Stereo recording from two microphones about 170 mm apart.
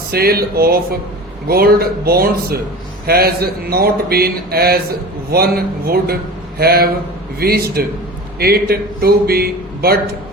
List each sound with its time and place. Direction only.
0.1 s speech: 65° right (ahead or behind)